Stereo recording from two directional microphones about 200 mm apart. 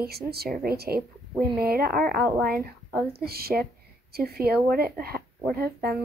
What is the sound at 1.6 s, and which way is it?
Speech, 50° right (ahead or behind).